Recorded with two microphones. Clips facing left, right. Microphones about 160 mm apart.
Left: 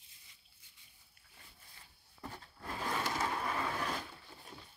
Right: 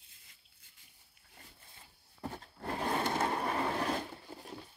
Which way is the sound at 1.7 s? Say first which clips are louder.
Right 2 dB; 25° right (ahead or behind).